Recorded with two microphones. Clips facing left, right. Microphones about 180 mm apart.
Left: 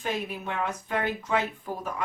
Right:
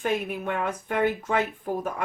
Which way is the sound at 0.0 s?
55° right (ahead or behind).